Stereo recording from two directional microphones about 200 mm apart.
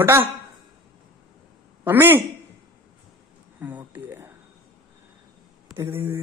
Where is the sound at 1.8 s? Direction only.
10° right (ahead or behind).